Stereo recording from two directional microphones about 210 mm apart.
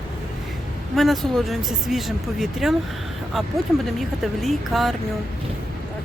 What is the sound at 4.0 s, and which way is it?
Speech, centre (ahead or behind).